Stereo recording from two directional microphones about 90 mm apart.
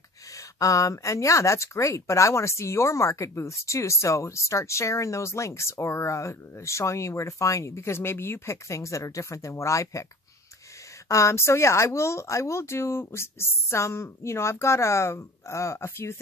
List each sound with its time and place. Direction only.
0.3 s speech: 40° left (ahead or behind)
11.1 s speech: 35° left (ahead or behind)